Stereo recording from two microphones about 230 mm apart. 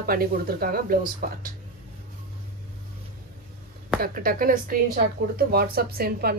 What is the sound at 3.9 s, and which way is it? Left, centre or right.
A woman's voice, right.